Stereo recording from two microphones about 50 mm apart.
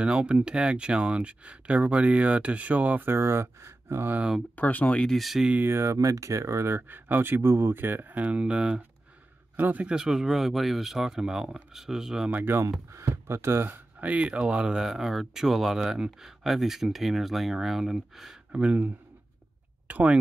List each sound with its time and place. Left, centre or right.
0.0 s speech: right
3.1 s speech: right
4.6 s speech: left
5.1 s speech: centre
5.7 s speech: right
6.9 s speech: right; by 8.8 s centre
9.6 s speech: right
9.8 s speech: centre
12.5 s speech: right
12.9 s speech: right
13.9 s speech: right
14.9 s speech: centre
18.5 s speech: right
19.9 s speech: right